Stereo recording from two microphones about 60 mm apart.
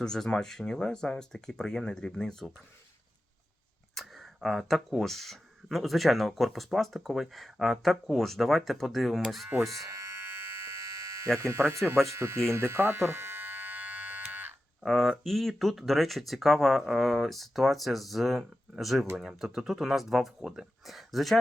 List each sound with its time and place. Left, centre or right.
0.0 s speech: centre
3.9 s speech: centre
9.7 s a sound: right
11.9 s electric shaver: right
14.8 s speech: centre